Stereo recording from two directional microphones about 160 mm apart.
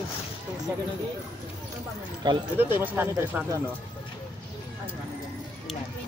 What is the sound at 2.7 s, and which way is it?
Speech, 15° right (ahead or behind).